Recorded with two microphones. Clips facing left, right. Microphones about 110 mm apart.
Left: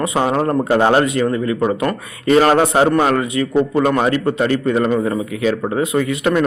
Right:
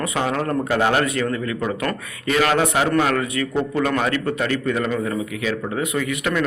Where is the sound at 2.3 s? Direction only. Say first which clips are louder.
Left 6 dB; 35° left (ahead or behind).